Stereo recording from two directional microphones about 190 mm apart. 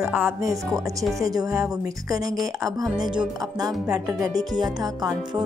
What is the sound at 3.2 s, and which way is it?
Music, 20° right (ahead or behind).